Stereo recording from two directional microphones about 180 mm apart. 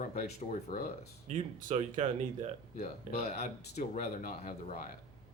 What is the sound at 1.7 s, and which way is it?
Speech, 35° right (ahead or behind).